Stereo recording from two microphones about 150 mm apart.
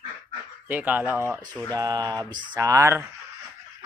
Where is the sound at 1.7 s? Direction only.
25° right (ahead or behind).